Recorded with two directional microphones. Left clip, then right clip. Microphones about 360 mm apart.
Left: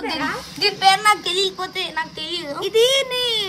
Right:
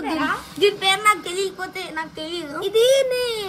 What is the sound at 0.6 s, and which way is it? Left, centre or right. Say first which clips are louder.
Speech: left 3 dB; left.